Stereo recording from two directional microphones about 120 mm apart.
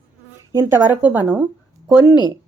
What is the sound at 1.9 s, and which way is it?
Speech, 35° left (ahead or behind).